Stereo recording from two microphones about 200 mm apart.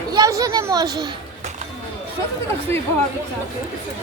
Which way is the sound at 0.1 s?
15° right (ahead or behind).